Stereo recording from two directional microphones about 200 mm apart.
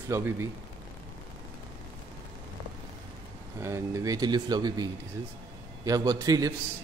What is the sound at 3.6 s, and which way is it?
A man's voice, 15° right (ahead or behind).